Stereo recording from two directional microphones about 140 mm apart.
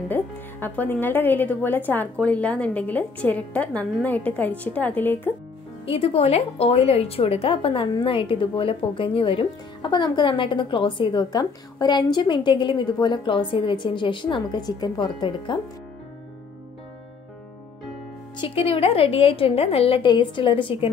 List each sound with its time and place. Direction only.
0.1 s speech: 10° left (ahead or behind)
5.9 s a woman's voice: 45° left (ahead or behind)
18.4 s speech: 40° left (ahead or behind)